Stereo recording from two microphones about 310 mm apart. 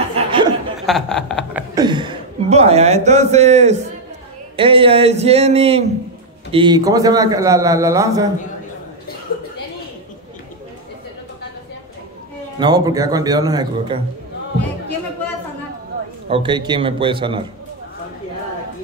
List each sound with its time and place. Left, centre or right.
0.1 s chuckle: centre
0.8 s speech: centre
1.8 s a man's voice: centre
12.5 s a man's voice: centre
16.3 s a man's voice: centre